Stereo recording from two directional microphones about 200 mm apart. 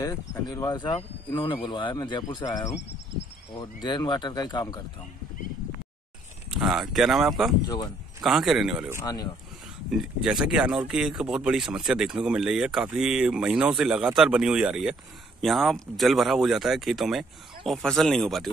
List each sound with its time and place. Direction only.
0.0 s speech: 15° left (ahead or behind)
6.5 s speech: centre (ahead or behind)
9.0 s speech: 20° left (ahead or behind)
9.8 s speech: centre (ahead or behind)